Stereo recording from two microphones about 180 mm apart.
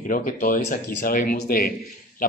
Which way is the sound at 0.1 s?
50° left (ahead or behind).